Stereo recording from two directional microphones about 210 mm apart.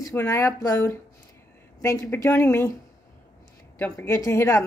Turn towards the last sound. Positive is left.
turn(degrees=15)  # may be behind; listen again after turning